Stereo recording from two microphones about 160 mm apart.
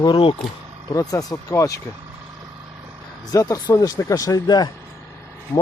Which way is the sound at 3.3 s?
20° left (ahead or behind).